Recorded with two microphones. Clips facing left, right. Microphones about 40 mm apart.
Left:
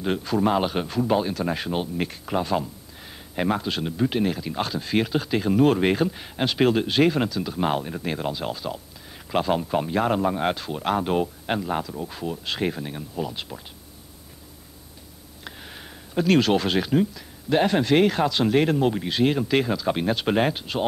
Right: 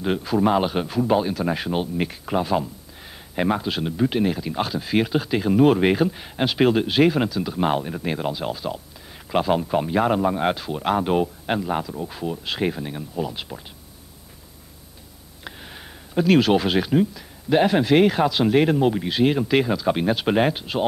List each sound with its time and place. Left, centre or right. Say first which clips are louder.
0.0 s speech: right 2 dB; centre
15.4 s speech: right 2 dB; centre